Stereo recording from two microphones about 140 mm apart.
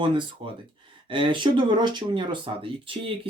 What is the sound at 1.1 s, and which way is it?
Speech, 35° right (ahead or behind).